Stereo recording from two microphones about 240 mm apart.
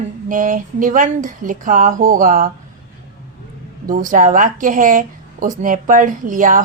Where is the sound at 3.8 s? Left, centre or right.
Right.